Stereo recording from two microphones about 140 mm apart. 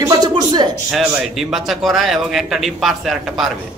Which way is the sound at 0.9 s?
Centre (ahead or behind).